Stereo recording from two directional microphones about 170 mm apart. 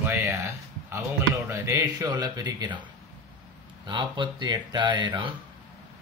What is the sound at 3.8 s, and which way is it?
Speech, 30° right (ahead or behind).